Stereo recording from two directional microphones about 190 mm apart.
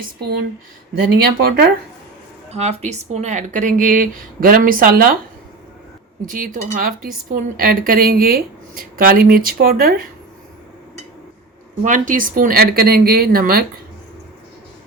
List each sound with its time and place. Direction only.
1.2 s speech: 55° right (ahead or behind)
2.5 s speech: 35° right (ahead or behind)
6.2 s speech: 45° right (ahead or behind)
11.8 s speech: 45° right (ahead or behind)